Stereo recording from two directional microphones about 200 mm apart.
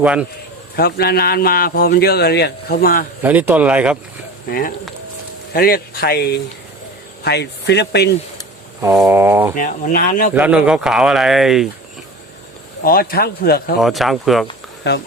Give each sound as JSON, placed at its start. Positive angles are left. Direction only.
{"t": 0.0, "sound": "speech", "side_deg": -5}
{"t": 0.8, "sound": "a man's voice", "side_deg": 50}
{"t": 3.2, "sound": "speech", "side_deg": -10}
{"t": 4.4, "sound": "a man's voice", "side_deg": 45}
{"t": 9.0, "sound": "speech", "side_deg": -10}
{"t": 9.6, "sound": "speech", "side_deg": 40}
{"t": 10.3, "sound": "speech", "side_deg": -5}
{"t": 12.8, "sound": "a man's voice", "side_deg": 45}
{"t": 13.7, "sound": "speech", "side_deg": 0}
{"t": 14.8, "sound": "speech", "side_deg": 60}